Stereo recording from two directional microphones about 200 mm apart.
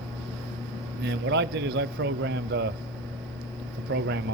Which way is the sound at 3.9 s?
60° right (ahead or behind).